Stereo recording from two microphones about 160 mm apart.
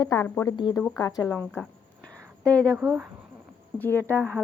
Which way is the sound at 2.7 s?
15° right (ahead or behind).